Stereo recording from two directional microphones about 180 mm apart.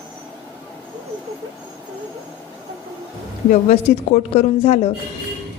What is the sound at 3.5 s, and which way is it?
A woman's voice, 40° left (ahead or behind).